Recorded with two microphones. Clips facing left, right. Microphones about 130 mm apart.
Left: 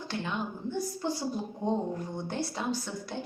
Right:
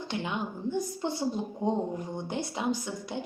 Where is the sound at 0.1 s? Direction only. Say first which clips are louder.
Right 1 dB; 15° right (ahead or behind).